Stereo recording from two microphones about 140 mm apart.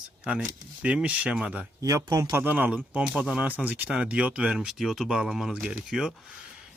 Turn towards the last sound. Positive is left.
turn(degrees=-5)  # may be behind; listen again after turning